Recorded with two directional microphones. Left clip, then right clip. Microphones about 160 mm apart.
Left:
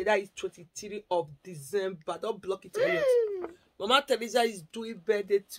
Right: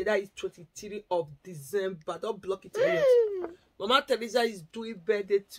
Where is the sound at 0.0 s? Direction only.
15° left (ahead or behind).